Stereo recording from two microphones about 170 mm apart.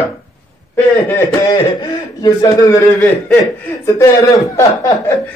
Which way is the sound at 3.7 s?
20° left (ahead or behind).